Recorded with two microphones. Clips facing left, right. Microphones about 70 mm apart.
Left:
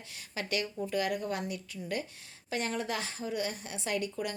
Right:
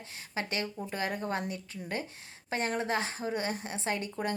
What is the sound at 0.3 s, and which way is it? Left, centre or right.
Speech, right.